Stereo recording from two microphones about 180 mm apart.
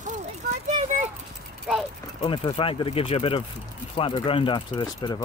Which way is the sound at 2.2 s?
30° left (ahead or behind).